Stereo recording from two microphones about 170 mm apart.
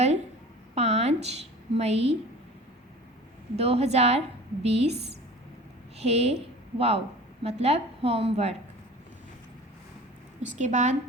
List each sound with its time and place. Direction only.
0.8 s a woman's voice: 40° right (ahead or behind)
3.6 s a woman's voice: 35° right (ahead or behind)
6.0 s a woman's voice: 40° right (ahead or behind)
10.4 s a woman's voice: 45° right (ahead or behind)